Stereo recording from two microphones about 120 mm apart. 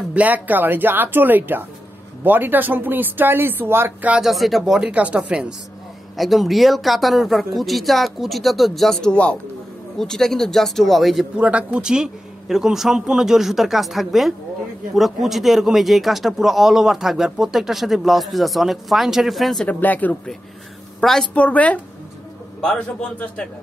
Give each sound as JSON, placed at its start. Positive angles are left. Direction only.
{"t": 0.1, "sound": "speech", "side_deg": -15}
{"t": 11.3, "sound": "speech", "side_deg": -10}
{"t": 19.7, "sound": "a man's voice", "side_deg": 15}
{"t": 21.0, "sound": "a woman's voice", "side_deg": 0}